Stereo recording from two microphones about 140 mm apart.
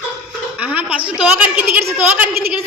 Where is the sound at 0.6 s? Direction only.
10° right (ahead or behind).